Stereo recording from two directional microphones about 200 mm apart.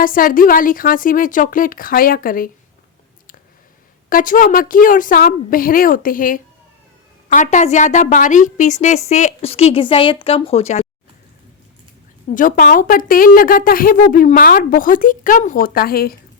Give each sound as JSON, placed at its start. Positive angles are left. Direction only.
{"t": 0.0, "sound": "speech", "side_deg": 45}
{"t": 4.1, "sound": "a woman's voice", "side_deg": 45}
{"t": 12.3, "sound": "speech", "side_deg": 40}